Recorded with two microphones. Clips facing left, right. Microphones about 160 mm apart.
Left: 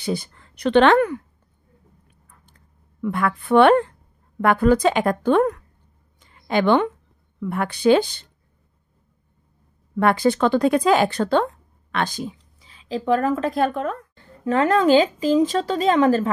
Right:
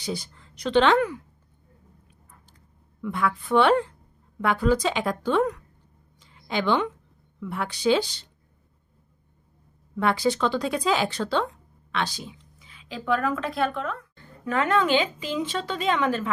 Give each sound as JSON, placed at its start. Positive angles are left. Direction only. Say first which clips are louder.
{"t": 0.0, "sound": "speech", "louder": "left 6 dB", "side_deg": 55}
{"t": 3.0, "sound": "a woman's voice", "louder": "left 4 dB", "side_deg": 55}
{"t": 6.2, "sound": "a sound", "louder": "left 7 dB", "side_deg": 55}
{"t": 7.3, "sound": "speech", "louder": "left 6 dB", "side_deg": 55}
{"t": 9.9, "sound": "speech", "louder": "left 5 dB", "side_deg": 55}
{"t": 12.5, "sound": "speech", "louder": "left 9 dB", "side_deg": 35}